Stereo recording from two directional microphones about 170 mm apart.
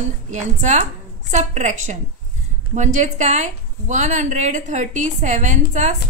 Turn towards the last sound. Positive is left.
turn(degrees=-45)  # may be behind; listen again after turning